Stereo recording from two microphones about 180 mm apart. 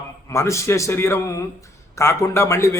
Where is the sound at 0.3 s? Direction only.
15° left (ahead or behind).